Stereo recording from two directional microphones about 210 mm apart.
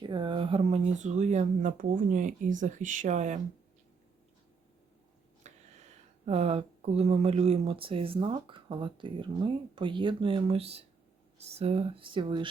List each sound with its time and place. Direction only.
0.0 s speech: 20° right (ahead or behind)
5.4 s speech: 35° right (ahead or behind)